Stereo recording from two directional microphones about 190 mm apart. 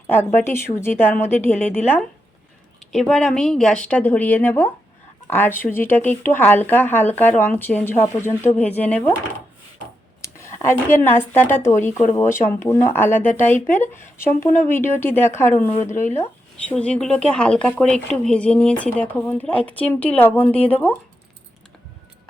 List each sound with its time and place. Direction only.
0.3 s a woman's voice: 10° left (ahead or behind)
10.2 s a sound: 15° left (ahead or behind)
10.6 s speech: 10° left (ahead or behind)
14.5 s speech: 40° left (ahead or behind)
15.0 s speech: 10° left (ahead or behind)